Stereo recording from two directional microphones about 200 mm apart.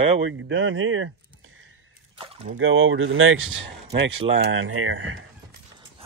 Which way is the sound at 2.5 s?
85° right.